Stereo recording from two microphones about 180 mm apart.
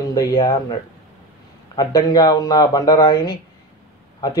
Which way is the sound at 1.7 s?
20° left (ahead or behind).